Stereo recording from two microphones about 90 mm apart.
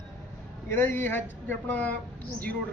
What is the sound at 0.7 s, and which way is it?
Speech, 25° left (ahead or behind).